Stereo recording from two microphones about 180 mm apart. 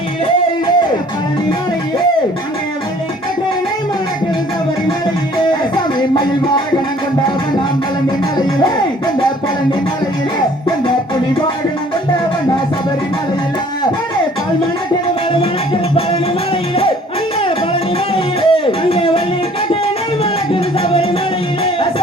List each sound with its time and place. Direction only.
18.1 s music: 30° left (ahead or behind)
21.6 s music: 30° left (ahead or behind)